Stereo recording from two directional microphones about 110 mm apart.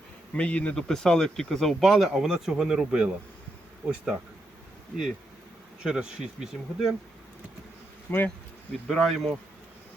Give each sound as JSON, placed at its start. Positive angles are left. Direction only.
{"t": 0.3, "sound": "speech", "side_deg": 10}
{"t": 5.8, "sound": "speech", "side_deg": -5}
{"t": 8.1, "sound": "speech", "side_deg": 15}
{"t": 8.9, "sound": "speech", "side_deg": 0}